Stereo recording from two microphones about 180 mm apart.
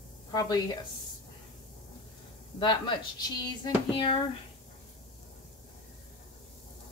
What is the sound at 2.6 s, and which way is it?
Speech, 25° left (ahead or behind).